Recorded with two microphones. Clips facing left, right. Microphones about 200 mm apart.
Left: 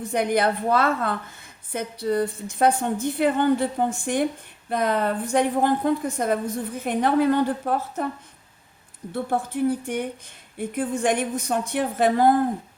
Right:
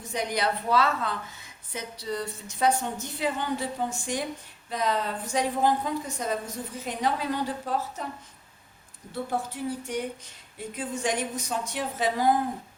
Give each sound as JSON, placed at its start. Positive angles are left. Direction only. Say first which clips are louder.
{"t": 0.1, "sound": "a woman's voice", "louder": "left 6 dB", "side_deg": 55}
{"t": 9.1, "sound": "a woman's voice", "louder": "left 6 dB", "side_deg": 55}